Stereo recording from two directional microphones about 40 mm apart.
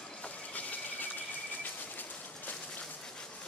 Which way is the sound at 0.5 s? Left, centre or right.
Left.